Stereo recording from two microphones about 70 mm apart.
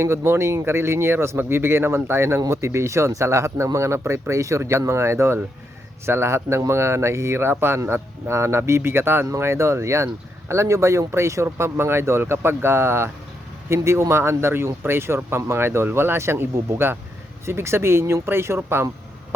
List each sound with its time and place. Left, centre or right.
0.0 s speech: right